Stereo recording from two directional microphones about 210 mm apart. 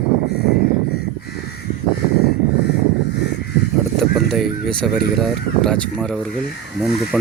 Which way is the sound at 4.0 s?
Centre (ahead or behind).